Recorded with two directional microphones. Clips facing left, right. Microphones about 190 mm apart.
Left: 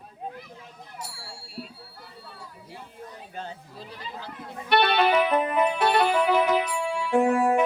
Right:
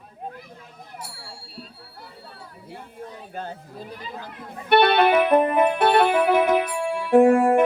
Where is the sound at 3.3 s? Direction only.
50° right (ahead or behind).